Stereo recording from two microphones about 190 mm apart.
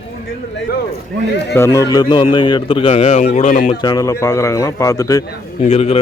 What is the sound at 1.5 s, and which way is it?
A man's voice, 15° left (ahead or behind).